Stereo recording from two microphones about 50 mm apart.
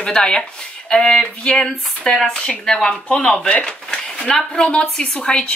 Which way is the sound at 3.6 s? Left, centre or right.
Centre.